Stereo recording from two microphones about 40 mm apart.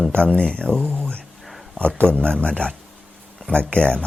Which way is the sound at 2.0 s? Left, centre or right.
Left.